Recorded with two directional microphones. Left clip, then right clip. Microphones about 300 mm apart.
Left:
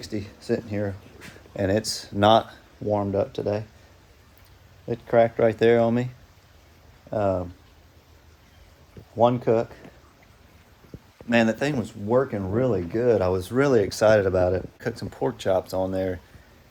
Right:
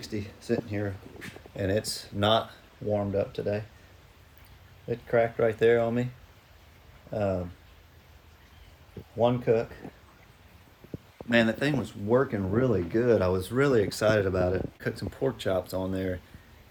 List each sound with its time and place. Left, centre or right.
0.0 s speech: centre
4.9 s speech: left
9.2 s speech: left
11.3 s speech: centre